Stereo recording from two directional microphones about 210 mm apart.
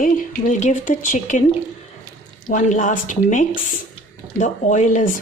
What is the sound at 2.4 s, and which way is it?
Speech, 35° left (ahead or behind).